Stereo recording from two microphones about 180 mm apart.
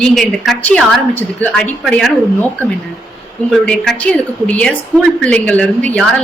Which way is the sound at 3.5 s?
5° left (ahead or behind).